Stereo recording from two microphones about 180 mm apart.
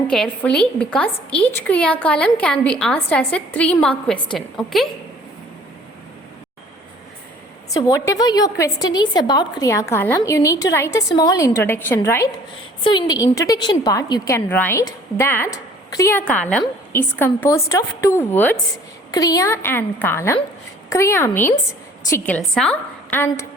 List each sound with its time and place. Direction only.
0.1 s a woman's voice: 5° left (ahead or behind)
7.7 s a woman's voice: 20° left (ahead or behind)
22.5 s a woman's voice: 5° left (ahead or behind)